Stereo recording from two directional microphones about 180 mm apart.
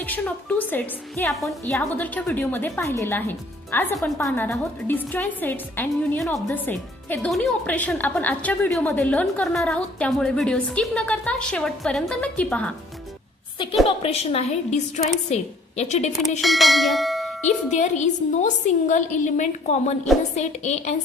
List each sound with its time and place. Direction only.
0.0 s a woman's voice: 10° left (ahead or behind)
1.3 s a woman's voice: centre (ahead or behind)
13.8 s a woman's voice: 35° left (ahead or behind)
16.4 s bell: centre (ahead or behind)
17.7 s a woman's voice: 40° left (ahead or behind)